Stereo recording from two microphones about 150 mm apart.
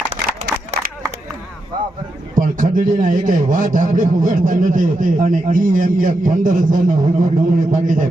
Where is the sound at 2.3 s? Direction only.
65° right (ahead or behind).